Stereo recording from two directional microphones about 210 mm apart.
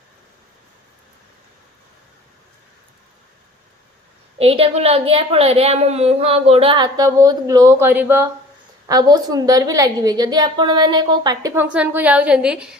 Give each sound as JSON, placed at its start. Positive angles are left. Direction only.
{"t": 4.4, "sound": "a woman's voice", "side_deg": -25}